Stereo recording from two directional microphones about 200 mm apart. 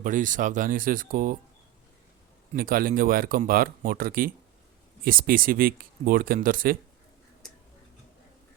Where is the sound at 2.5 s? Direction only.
45° right (ahead or behind).